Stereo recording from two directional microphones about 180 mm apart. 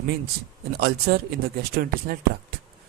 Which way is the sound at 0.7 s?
60° right (ahead or behind).